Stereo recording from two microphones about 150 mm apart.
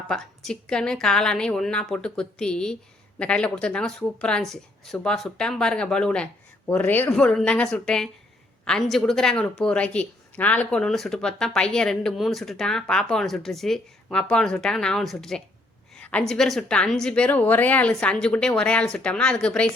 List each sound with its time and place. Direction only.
0.1 s a woman's voice: 5° left (ahead or behind)